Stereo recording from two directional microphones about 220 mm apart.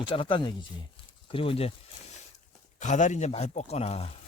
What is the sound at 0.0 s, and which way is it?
Speech, 20° left (ahead or behind).